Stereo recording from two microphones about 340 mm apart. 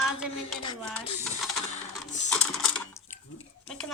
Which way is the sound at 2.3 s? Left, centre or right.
Centre.